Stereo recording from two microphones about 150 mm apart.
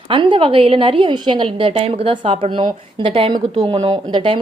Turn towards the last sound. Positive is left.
turn(degrees=-35)  # may be behind; listen again after turning